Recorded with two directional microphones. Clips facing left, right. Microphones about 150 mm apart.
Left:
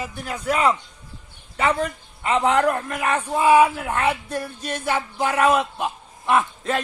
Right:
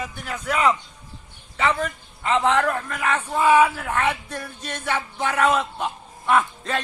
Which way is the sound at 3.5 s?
30° left (ahead or behind).